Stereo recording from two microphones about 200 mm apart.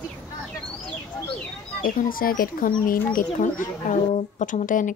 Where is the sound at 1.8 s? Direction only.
45° left (ahead or behind).